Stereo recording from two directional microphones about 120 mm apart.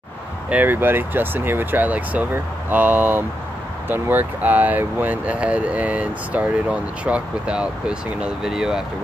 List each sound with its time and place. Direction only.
0.5 s speech: 15° right (ahead or behind)